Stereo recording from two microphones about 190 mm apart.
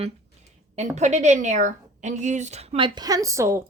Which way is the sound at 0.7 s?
35° right (ahead or behind).